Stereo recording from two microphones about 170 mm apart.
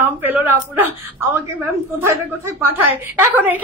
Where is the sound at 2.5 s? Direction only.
10° right (ahead or behind).